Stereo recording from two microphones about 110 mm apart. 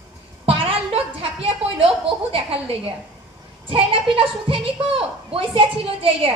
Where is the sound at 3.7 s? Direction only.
55° right (ahead or behind).